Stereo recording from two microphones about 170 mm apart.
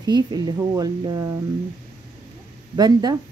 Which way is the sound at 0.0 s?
25° right (ahead or behind).